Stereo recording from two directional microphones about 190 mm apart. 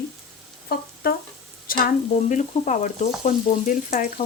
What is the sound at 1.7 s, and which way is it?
Speech, 50° left (ahead or behind).